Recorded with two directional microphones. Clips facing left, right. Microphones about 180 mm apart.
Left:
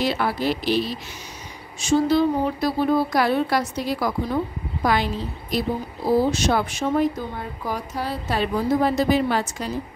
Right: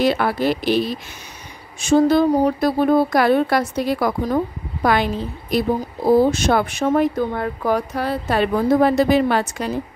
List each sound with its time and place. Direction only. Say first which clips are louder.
0.0 s a woman's voice: right 5 dB; 55° right (ahead or behind)